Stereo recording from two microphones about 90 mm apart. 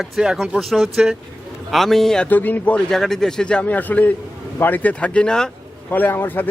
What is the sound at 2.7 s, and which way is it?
A man's voice, 5° left (ahead or behind).